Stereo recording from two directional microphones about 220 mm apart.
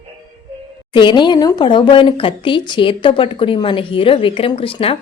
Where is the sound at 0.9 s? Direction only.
20° left (ahead or behind).